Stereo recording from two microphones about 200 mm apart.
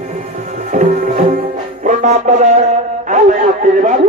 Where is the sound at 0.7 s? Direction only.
40° right (ahead or behind).